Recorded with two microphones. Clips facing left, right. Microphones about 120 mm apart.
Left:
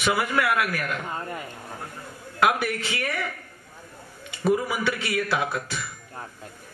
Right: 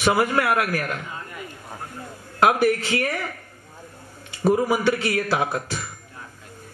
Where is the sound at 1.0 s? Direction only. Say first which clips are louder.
Left 4 dB; 45° left (ahead or behind).